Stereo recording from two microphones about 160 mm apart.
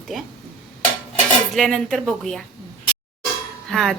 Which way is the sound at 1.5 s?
5° left (ahead or behind).